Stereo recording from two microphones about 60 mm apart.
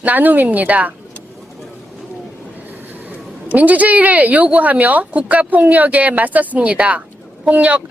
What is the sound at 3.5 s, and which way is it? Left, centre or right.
Speech, right.